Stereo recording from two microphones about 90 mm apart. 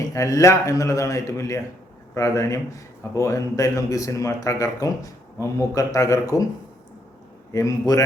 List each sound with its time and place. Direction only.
0.1 s a man's voice: 35° left (ahead or behind)
7.5 s a man's voice: 40° left (ahead or behind)